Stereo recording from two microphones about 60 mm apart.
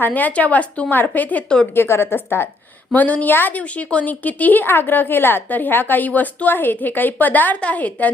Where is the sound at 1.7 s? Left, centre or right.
Left.